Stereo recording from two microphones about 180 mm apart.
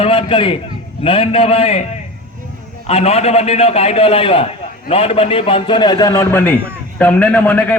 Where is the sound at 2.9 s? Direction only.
35° left (ahead or behind).